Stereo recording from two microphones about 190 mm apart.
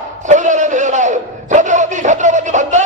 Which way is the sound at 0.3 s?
40° right (ahead or behind).